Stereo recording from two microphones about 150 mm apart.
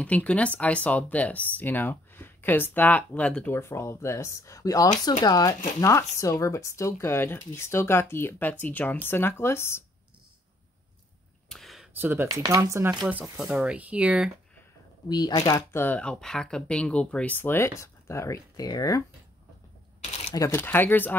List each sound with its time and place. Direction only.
0.0 s speech: 10° left (ahead or behind)
11.4 s a sound: centre (ahead or behind)
11.9 s speech: 15° right (ahead or behind)
13.0 s speech: 5° right (ahead or behind)
15.0 s speech: 25° left (ahead or behind)
20.3 s speech: 15° left (ahead or behind)